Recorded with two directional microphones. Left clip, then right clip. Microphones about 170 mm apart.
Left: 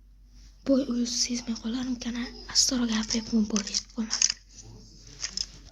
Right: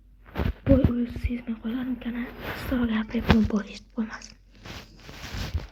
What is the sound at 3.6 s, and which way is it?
Speech, 5° left (ahead or behind).